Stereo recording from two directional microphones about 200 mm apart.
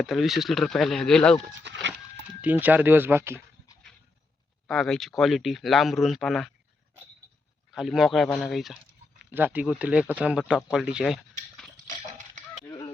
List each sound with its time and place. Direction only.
0.0 s speech: centre (ahead or behind)
1.6 s a sound: 65° right (ahead or behind)
2.4 s speech: 10° right (ahead or behind)
4.6 s speech: centre (ahead or behind)
7.7 s speech: centre (ahead or behind)
12.6 s a sound: 20° left (ahead or behind)